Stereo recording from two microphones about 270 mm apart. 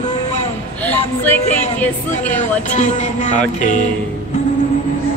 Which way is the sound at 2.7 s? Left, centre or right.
Left.